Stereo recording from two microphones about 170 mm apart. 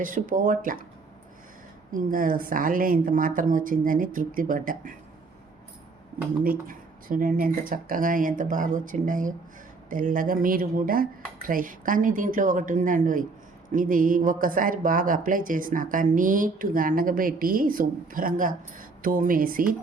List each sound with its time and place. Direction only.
0.0 s speech: 50° right (ahead or behind)
1.9 s speech: 55° right (ahead or behind)
6.4 s speech: 55° right (ahead or behind)